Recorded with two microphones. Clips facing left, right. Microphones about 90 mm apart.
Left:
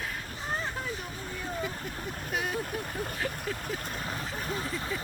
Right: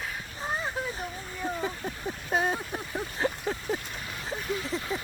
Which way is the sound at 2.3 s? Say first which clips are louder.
Right 6 dB; 30° right (ahead or behind).